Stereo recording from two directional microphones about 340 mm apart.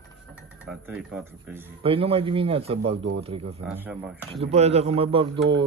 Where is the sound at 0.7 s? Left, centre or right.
Centre.